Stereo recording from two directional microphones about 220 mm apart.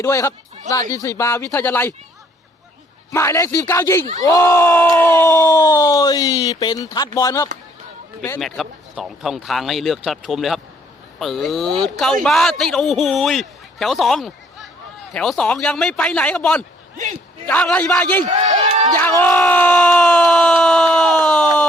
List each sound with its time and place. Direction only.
0.0 s speech: 10° left (ahead or behind)
3.1 s a man's voice: 15° left (ahead or behind)
18.3 s a man's voice: 35° right (ahead or behind)
19.2 s a man's voice: 10° left (ahead or behind)